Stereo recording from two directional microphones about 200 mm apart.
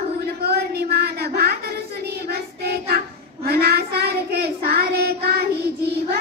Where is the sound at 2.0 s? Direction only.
50° right (ahead or behind).